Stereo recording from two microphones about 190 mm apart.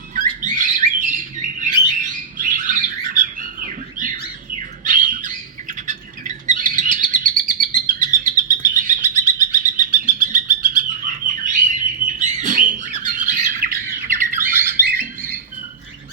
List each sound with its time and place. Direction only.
0.1 s bird: 40° right (ahead or behind)
14.3 s squawk: 10° right (ahead or behind)